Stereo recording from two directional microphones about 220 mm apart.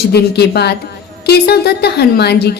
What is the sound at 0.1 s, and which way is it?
A woman's voice, 50° left (ahead or behind).